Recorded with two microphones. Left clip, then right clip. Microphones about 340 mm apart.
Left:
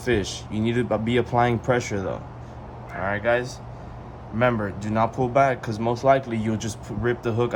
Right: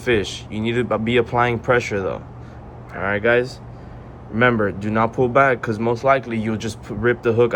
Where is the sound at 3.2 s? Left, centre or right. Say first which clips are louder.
Right 6 dB; centre.